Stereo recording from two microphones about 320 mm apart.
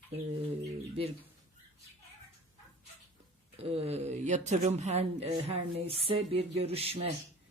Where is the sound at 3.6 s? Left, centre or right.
Centre.